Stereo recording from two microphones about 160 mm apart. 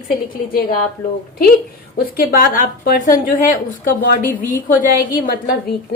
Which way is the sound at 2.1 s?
60° left (ahead or behind).